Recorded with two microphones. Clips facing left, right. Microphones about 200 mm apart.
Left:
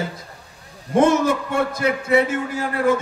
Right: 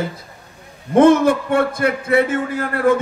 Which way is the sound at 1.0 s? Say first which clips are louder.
Right 5 dB; 55° right (ahead or behind).